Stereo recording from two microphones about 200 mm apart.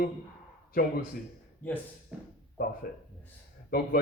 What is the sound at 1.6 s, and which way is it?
Speech, 10° left (ahead or behind).